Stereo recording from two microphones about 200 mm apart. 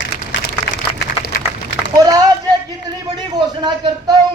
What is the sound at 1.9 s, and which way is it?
A man's voice, 20° right (ahead or behind).